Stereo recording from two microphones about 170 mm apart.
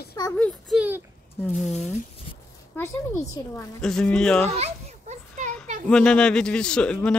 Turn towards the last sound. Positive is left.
turn(degrees=5)  # may be behind; listen again after turning